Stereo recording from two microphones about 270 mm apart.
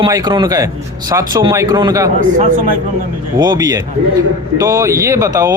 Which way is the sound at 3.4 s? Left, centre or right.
Centre.